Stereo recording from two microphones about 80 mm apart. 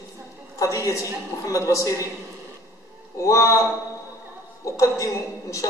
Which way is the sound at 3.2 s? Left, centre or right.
Left.